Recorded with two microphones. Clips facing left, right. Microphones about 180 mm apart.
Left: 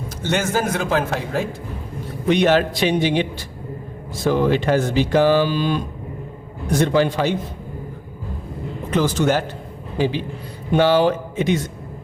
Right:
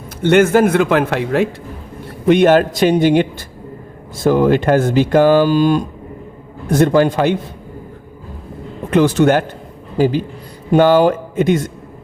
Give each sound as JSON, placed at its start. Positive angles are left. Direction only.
{"t": 0.2, "sound": "a man's voice", "side_deg": -60}
{"t": 2.2, "sound": "speech", "side_deg": -50}
{"t": 8.9, "sound": "a man's voice", "side_deg": -60}
{"t": 10.0, "sound": "speech", "side_deg": -45}